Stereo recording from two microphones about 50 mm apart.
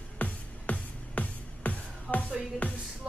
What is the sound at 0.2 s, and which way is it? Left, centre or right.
Music, left.